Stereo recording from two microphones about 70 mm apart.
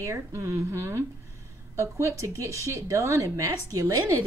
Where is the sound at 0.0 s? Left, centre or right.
Right.